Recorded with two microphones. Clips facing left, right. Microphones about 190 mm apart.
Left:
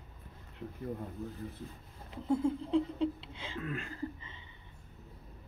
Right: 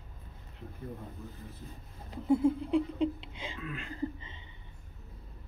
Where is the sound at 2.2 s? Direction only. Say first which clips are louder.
Right 4 dB; 10° right (ahead or behind).